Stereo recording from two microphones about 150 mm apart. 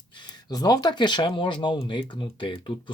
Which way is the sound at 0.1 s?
30° left (ahead or behind).